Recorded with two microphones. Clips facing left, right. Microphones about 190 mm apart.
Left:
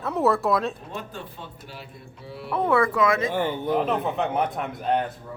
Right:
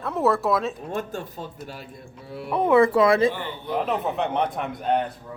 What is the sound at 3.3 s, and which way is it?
Speech, 45° left (ahead or behind).